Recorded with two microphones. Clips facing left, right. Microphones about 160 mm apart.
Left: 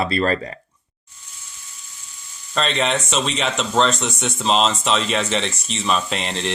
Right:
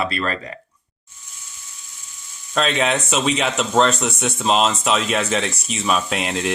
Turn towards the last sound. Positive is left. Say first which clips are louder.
# right 2 dB
turn(degrees=-5)  # may be behind; listen again after turning